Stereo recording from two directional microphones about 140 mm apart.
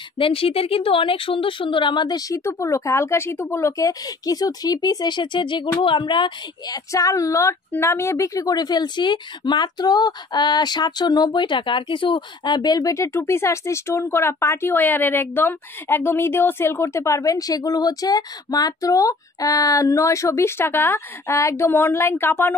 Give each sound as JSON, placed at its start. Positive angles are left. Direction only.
{"t": 0.2, "sound": "speech", "side_deg": 40}
{"t": 6.9, "sound": "a woman's voice", "side_deg": 25}